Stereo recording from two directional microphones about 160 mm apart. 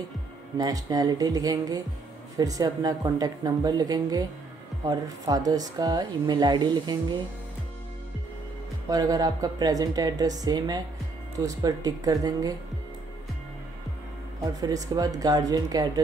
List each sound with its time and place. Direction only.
0.6 s speech: 25° right (ahead or behind)
8.8 s speech: 20° right (ahead or behind)
14.4 s speech: 20° right (ahead or behind)